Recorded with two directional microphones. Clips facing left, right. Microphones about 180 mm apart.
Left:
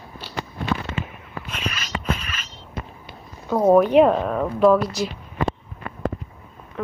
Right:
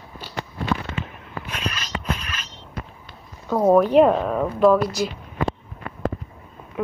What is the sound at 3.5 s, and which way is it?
Speech, centre (ahead or behind).